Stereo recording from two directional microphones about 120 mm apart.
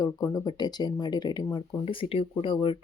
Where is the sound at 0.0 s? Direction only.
30° left (ahead or behind).